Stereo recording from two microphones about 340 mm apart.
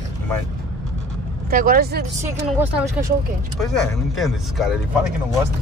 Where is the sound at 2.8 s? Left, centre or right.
Centre.